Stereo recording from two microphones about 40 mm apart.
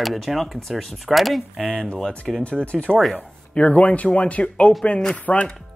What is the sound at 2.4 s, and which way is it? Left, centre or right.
Speech, left.